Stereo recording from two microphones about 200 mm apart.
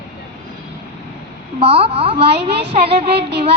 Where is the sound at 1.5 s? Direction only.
30° right (ahead or behind).